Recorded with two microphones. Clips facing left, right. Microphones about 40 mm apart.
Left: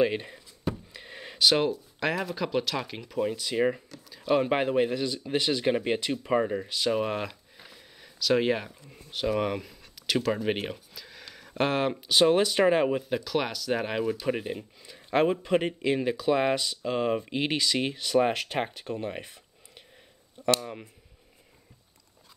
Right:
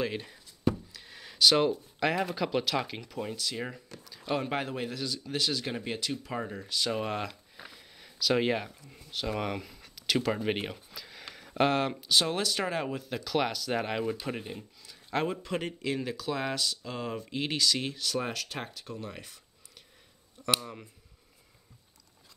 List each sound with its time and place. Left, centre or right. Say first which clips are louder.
0.0 s speech: left 8 dB; left
0.9 s a sound: left 5 dB; left
1.4 s speech: even; centre; by 3.8 s left
4.1 s speech: left 7 dB; centre
7.7 s sniff: left 1 dB; centre
9.1 s speech: left 5 dB; centre
10.7 s a sound: left 3 dB; centre
11.3 s speech: even; centre; by 13.1 s left
13.1 s speech: left 2 dB; centre
14.4 s speech: left 6 dB; left